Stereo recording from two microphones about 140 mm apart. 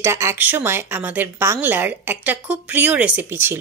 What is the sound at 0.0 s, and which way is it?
A woman's voice, 20° right (ahead or behind).